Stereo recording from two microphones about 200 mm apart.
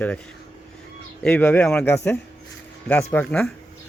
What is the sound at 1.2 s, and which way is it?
Speech, 10° left (ahead or behind).